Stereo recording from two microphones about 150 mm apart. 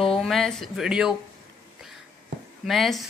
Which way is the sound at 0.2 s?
5° left (ahead or behind).